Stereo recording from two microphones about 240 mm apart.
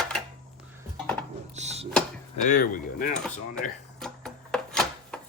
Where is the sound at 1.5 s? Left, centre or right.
Right.